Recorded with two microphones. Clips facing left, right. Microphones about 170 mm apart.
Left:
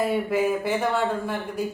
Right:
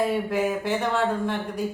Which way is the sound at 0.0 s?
5° left (ahead or behind).